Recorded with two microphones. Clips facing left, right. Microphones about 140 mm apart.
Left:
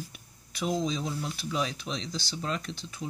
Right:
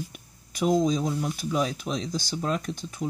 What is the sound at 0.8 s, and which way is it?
Speech, 45° right (ahead or behind).